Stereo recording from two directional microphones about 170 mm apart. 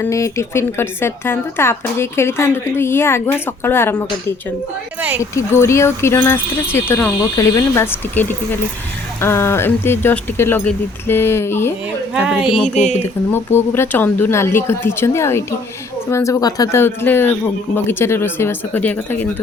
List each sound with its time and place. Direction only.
0.0 s a woman's voice: 15° left (ahead or behind)
5.3 s a woman's voice: 15° left (ahead or behind)
12.1 s speech: 5° right (ahead or behind)
12.7 s speech: 40° left (ahead or behind)
13.3 s a woman's voice: 15° left (ahead or behind)